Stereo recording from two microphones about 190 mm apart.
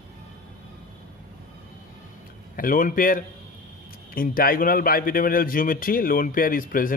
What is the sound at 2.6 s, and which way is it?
A man's voice, 45° left (ahead or behind).